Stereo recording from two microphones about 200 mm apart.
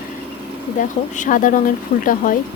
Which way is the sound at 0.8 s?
40° left (ahead or behind).